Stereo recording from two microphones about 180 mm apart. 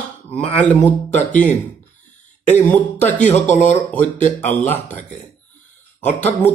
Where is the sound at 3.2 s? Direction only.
40° left (ahead or behind).